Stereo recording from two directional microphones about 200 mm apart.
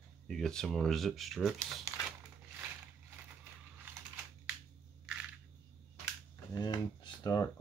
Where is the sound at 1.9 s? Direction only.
15° right (ahead or behind).